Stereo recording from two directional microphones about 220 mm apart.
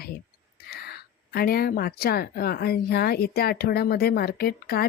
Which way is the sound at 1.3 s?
45° left (ahead or behind).